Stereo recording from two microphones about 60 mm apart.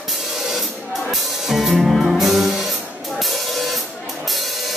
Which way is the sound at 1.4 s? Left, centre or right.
Centre.